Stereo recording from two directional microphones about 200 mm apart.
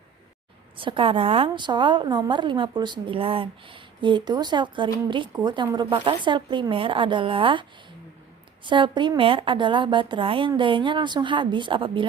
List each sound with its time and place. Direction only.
0.8 s a woman's voice: 25° right (ahead or behind)